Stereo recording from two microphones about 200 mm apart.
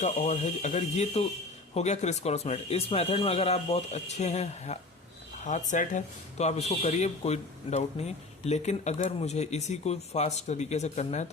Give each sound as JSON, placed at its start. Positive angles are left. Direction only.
{"t": 0.0, "sound": "speech", "side_deg": 35}